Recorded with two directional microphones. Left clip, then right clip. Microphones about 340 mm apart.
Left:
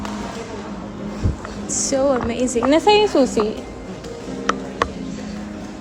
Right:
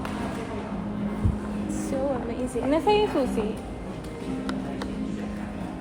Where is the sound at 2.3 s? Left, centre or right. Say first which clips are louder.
Left 9 dB; left.